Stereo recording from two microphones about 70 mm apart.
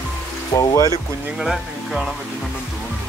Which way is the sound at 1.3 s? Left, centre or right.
Centre.